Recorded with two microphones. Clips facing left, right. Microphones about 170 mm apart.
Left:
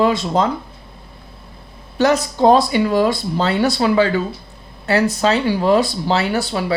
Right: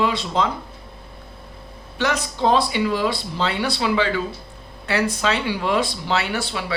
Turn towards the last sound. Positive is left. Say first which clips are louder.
# left 5 dB
turn(degrees=40)  # may be behind; listen again after turning